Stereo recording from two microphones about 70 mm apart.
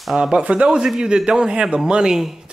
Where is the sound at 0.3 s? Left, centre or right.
Centre.